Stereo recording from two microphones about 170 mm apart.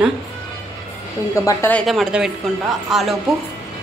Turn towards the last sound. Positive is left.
turn(degrees=0)  # may be behind; listen again after turning